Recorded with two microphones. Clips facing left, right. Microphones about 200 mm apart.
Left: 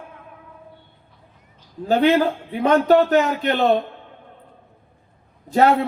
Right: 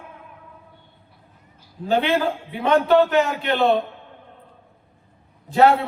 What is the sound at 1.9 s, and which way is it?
A man's voice, 40° left (ahead or behind).